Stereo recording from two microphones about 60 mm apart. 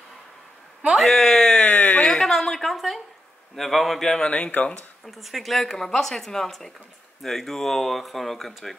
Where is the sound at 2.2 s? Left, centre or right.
Centre.